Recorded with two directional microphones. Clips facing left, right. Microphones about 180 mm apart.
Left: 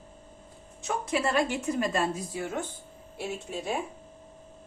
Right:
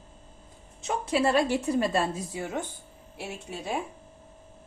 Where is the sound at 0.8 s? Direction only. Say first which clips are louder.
Right 3 dB; 30° right (ahead or behind).